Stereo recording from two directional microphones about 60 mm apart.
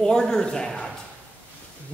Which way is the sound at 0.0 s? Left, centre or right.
Centre.